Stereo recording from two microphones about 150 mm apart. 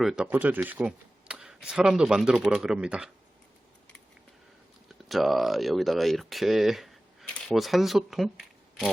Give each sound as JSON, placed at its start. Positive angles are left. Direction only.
{"t": 0.0, "sound": "speech", "side_deg": 0}
{"t": 0.3, "sound": "speech", "side_deg": -10}
{"t": 4.9, "sound": "speech", "side_deg": 0}